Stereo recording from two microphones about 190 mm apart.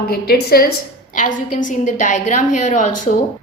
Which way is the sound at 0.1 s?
55° left (ahead or behind).